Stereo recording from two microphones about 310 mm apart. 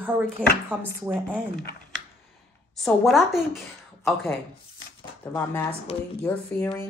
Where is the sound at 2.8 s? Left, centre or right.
Centre.